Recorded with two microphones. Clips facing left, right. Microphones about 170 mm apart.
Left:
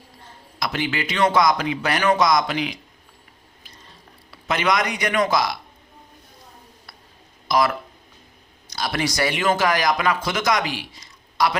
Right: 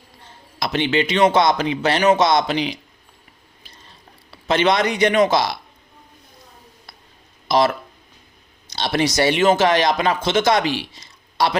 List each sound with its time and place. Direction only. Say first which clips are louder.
0.6 s speech: right 6 dB; 25° right (ahead or behind)
4.3 s speech: right 4 dB; 30° right (ahead or behind)
7.4 s speech: right 3 dB; 25° right (ahead or behind)